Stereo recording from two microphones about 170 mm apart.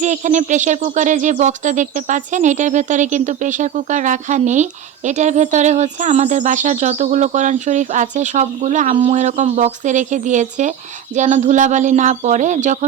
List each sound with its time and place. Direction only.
0.0 s speech: 45° right (ahead or behind)